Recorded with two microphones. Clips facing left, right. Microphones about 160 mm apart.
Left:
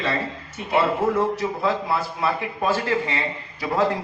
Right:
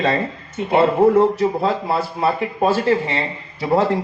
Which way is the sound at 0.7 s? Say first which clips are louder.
Right 7 dB; 35° right (ahead or behind).